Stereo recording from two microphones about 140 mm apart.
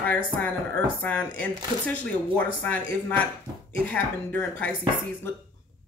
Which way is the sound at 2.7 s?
10° left (ahead or behind).